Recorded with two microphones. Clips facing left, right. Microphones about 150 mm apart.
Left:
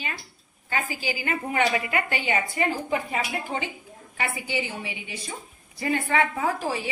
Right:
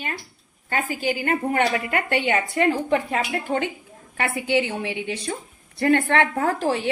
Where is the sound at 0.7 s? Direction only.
55° right (ahead or behind).